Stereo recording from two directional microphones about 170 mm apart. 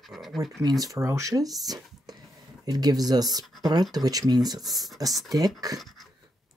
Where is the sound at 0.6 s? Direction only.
20° right (ahead or behind).